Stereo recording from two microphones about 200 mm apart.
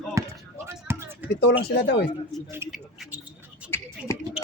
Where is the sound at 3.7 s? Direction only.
10° left (ahead or behind).